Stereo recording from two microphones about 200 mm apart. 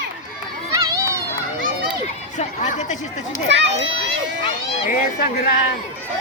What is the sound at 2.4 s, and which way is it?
A woman's voice, 35° left (ahead or behind).